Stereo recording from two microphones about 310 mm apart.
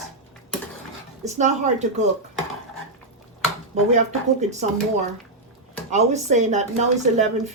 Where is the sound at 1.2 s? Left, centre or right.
Right.